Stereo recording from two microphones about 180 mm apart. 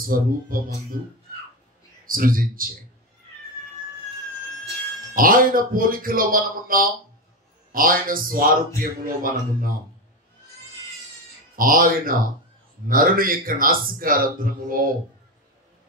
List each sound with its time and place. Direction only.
0.0 s a man's voice: 50° right (ahead or behind)
2.0 s a man's voice: 50° right (ahead or behind)
5.1 s a man's voice: 50° right (ahead or behind)
11.5 s a man's voice: 50° right (ahead or behind)